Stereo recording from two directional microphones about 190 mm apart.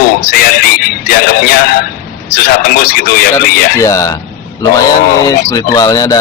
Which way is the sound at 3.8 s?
15° left (ahead or behind).